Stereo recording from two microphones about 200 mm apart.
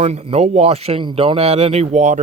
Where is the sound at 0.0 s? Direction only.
30° right (ahead or behind).